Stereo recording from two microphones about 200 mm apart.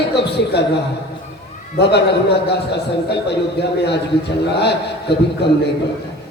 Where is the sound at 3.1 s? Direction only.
55° left (ahead or behind).